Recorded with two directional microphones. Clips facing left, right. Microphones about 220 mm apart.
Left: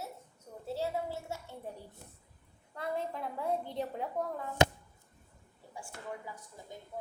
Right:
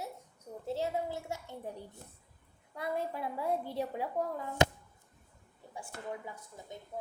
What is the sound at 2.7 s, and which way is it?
A woman's voice, 10° right (ahead or behind).